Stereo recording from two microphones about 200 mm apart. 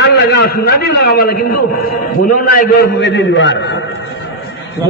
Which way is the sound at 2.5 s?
45° left (ahead or behind).